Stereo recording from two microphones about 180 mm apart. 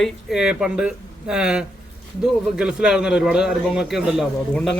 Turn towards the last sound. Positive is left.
turn(degrees=5)  # may be behind; listen again after turning